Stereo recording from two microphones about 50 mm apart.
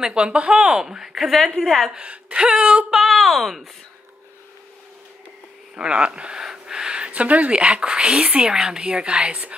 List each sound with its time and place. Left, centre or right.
0.0 s a woman's voice: centre
2.0 s speech: right
2.9 s speech: centre
5.8 s speech: centre